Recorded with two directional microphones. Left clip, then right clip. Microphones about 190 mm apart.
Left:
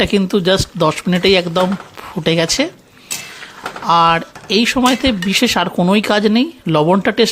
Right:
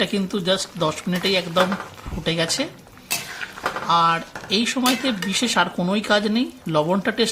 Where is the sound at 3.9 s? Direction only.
45° left (ahead or behind).